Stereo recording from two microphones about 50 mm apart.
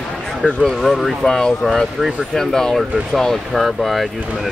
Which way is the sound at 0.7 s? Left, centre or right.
Centre.